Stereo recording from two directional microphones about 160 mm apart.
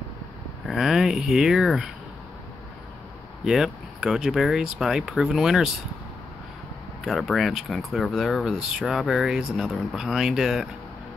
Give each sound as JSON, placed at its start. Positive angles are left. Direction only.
{"t": 0.7, "sound": "speech", "side_deg": 0}
{"t": 3.4, "sound": "speech", "side_deg": -5}
{"t": 7.1, "sound": "speech", "side_deg": 0}